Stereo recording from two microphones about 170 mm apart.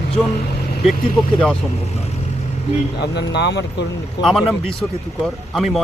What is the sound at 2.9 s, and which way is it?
Speech, 85° left.